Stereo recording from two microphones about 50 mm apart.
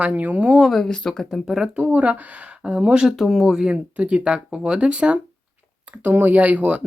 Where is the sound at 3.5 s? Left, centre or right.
Centre.